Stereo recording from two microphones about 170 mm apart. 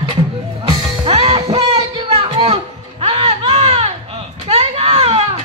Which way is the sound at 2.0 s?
35° right (ahead or behind).